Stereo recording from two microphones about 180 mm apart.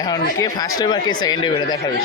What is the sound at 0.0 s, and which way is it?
Speech, 20° left (ahead or behind).